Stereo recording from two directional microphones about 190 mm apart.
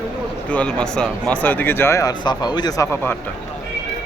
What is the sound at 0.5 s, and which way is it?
Speech, 5° left (ahead or behind).